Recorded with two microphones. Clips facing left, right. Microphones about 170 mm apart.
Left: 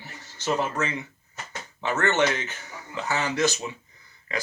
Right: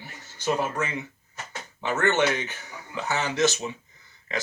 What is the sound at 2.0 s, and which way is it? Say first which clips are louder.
Speech: even; 15° right (ahead or behind).